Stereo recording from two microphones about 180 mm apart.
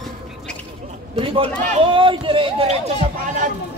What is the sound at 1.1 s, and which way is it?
Speech, 30° right (ahead or behind).